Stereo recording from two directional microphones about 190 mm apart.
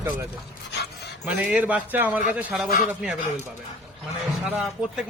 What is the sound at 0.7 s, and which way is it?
Dog, 60° left (ahead or behind).